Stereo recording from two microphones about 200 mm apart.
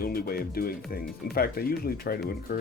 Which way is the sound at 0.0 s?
50° left (ahead or behind).